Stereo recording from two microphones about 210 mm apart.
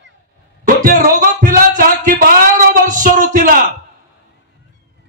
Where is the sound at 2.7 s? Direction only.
40° right (ahead or behind).